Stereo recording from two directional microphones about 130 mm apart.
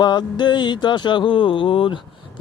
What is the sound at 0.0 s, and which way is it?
Speech, 35° left (ahead or behind).